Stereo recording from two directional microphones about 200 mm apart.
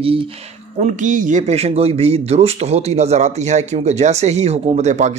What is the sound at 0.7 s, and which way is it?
Speech, 40° right (ahead or behind).